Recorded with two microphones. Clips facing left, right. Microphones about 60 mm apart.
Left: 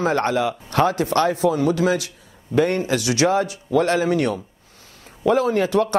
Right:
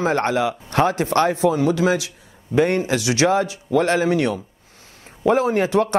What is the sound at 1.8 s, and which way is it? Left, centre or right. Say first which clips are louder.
Speech: right 1 dB; centre.